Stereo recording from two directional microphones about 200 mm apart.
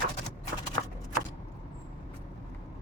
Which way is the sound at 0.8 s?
20° left (ahead or behind).